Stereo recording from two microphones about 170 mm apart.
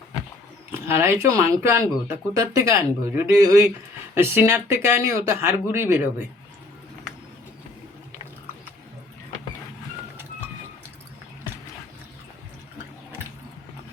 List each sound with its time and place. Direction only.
0.7 s speech: 15° right (ahead or behind)